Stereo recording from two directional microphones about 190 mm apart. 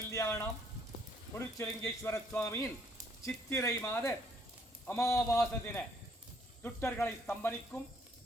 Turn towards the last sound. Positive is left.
turn(degrees=10)  # may be behind; listen again after turning